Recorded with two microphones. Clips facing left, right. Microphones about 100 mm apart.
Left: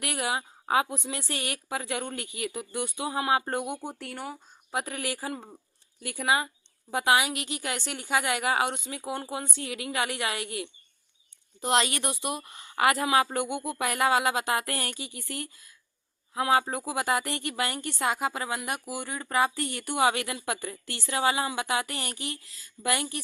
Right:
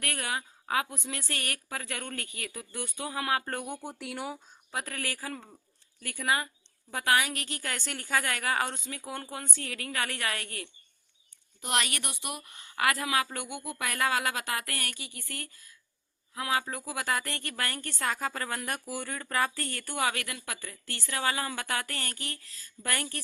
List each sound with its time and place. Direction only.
0.0 s a woman's voice: 20° left (ahead or behind)
3.9 s speech: 5° right (ahead or behind)
4.7 s a woman's voice: 20° left (ahead or behind)